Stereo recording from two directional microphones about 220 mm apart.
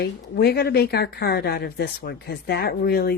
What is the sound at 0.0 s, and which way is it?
Speech, 45° left (ahead or behind).